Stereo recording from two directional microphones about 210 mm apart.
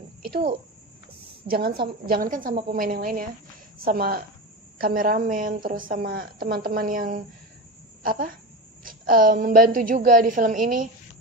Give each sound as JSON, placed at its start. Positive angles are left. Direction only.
{"t": 1.5, "sound": "a woman's voice", "side_deg": -45}